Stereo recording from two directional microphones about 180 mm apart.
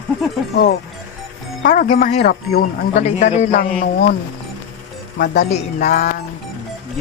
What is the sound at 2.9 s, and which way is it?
Speech, 40° left (ahead or behind).